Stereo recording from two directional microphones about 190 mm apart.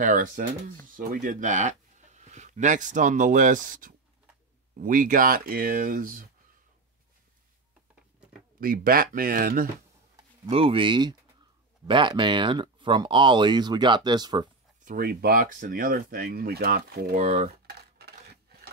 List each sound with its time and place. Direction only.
0.0 s speech: 45° right (ahead or behind)
8.5 s speech: 50° right (ahead or behind)
10.5 s speech: 30° right (ahead or behind)
14.9 s speech: 50° right (ahead or behind)
17.6 s a sound: 55° right (ahead or behind)